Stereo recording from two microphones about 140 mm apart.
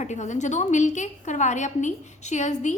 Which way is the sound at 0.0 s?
55° left (ahead or behind).